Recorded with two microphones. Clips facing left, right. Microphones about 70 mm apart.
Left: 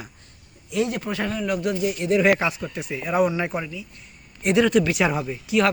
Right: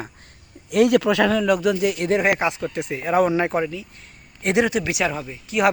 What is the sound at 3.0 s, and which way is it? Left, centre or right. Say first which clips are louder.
Speech: right 3 dB; right.